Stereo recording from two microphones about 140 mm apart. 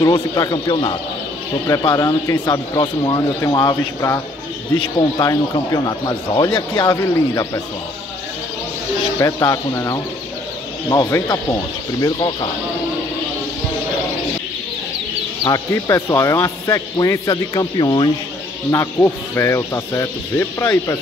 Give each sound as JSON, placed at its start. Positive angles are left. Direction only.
{"t": 0.0, "sound": "speech", "side_deg": 30}
{"t": 9.2, "sound": "speech", "side_deg": 25}
{"t": 15.4, "sound": "speech", "side_deg": 25}
{"t": 18.7, "sound": "speech", "side_deg": 20}